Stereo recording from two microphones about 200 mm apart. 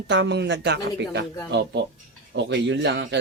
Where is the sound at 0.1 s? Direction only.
60° right (ahead or behind).